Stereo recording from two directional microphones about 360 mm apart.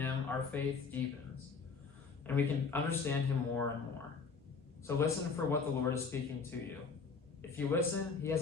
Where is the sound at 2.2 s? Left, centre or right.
Centre.